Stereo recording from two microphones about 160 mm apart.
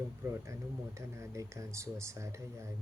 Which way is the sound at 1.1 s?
20° right (ahead or behind).